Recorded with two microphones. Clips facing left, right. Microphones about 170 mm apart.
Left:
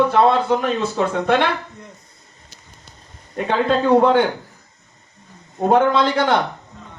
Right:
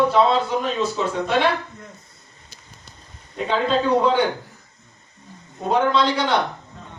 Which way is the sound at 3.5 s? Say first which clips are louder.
Left 4 dB; 55° left (ahead or behind).